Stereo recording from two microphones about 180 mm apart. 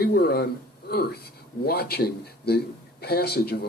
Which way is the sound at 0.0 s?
60° left (ahead or behind).